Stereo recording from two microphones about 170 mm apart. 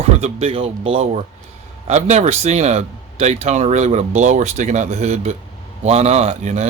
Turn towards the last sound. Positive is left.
turn(degrees=-45)  # may be behind; listen again after turning